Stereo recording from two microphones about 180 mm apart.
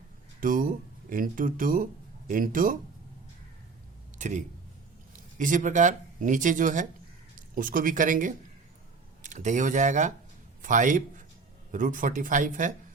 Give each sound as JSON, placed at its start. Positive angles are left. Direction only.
{"t": 0.3, "sound": "speech", "side_deg": -50}
{"t": 4.2, "sound": "a man's voice", "side_deg": -45}